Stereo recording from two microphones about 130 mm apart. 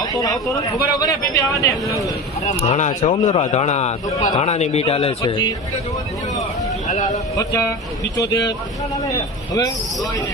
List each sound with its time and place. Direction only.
0.0 s speech: 30° left (ahead or behind)
2.4 s a man's voice: 60° left (ahead or behind)
5.3 s speech: 30° left (ahead or behind)
6.8 s speech: 70° left (ahead or behind)
7.3 s speech: 25° left (ahead or behind)